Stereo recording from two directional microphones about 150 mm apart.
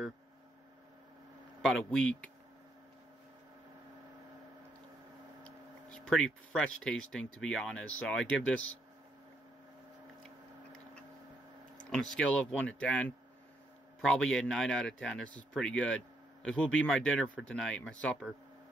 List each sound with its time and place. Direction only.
1.6 s a man's voice: 5° left (ahead or behind)
5.4 s speech: 5° left (ahead or behind)
11.8 s a man's voice: 5° left (ahead or behind)